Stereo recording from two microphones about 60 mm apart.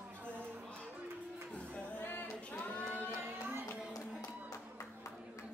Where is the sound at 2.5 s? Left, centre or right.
Left.